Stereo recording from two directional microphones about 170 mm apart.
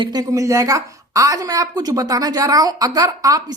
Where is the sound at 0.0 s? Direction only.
25° right (ahead or behind).